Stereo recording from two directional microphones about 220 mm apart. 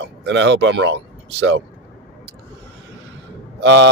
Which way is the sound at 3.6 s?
55° right (ahead or behind).